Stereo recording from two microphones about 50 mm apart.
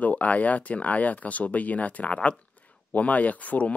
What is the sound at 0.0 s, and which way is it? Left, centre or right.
Speech, left.